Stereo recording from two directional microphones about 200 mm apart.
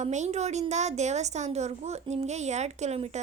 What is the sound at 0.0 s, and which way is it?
A woman's voice, 35° right (ahead or behind).